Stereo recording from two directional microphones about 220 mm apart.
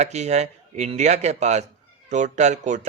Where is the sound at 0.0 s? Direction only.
30° right (ahead or behind).